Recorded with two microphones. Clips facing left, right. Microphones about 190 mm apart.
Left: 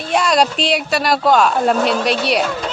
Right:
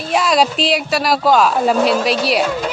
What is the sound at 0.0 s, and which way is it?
Speech, centre (ahead or behind).